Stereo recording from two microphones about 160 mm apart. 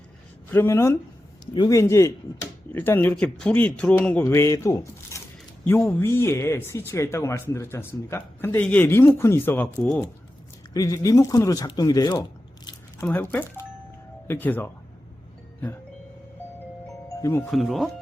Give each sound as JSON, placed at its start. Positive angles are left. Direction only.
{"t": 0.5, "sound": "speech", "side_deg": 15}
{"t": 10.8, "sound": "speech", "side_deg": 20}
{"t": 13.1, "sound": "speech", "side_deg": 10}
{"t": 17.2, "sound": "speech", "side_deg": 15}
{"t": 17.5, "sound": "speech", "side_deg": 0}